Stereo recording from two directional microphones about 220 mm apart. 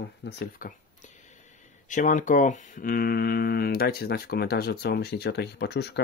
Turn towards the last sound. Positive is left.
turn(degrees=50)  # may be behind; listen again after turning